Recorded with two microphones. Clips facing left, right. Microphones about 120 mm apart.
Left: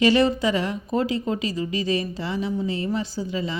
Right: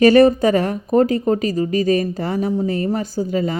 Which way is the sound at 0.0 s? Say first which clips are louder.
Right 8 dB; 50° right (ahead or behind).